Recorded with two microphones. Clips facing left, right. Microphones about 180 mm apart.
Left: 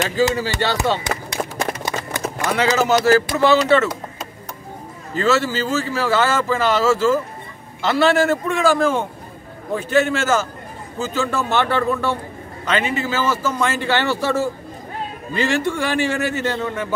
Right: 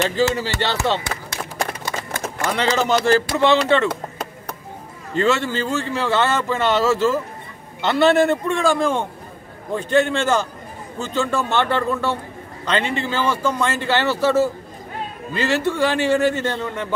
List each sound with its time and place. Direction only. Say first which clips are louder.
0.1 s a sound: left 1 dB; 10° left (ahead or behind)
3.1 s speech: left 1 dB; 5° left (ahead or behind)
5.1 s a man's voice: left 1 dB; 5° left (ahead or behind)